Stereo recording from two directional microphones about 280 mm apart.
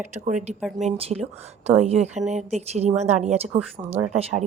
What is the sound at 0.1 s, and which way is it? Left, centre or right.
Speech, right.